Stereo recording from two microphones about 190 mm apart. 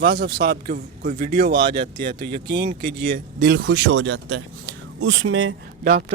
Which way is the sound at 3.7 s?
75° right (ahead or behind).